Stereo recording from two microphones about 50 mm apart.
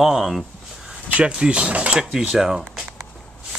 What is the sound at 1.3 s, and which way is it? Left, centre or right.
Speech, centre.